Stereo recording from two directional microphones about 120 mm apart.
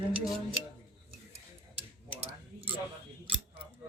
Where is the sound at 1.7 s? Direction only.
55° right (ahead or behind).